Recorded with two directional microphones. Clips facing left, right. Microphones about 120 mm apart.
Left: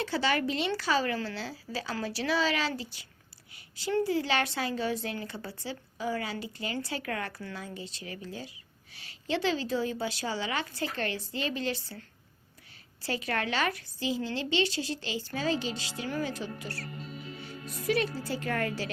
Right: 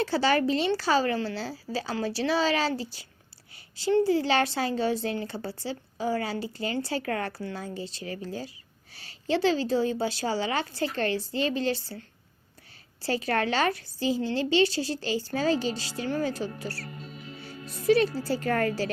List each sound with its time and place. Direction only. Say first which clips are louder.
0.0 s a woman's voice: right 5 dB; 35° right (ahead or behind)
17.8 s a woman's voice: right 7 dB; 30° right (ahead or behind)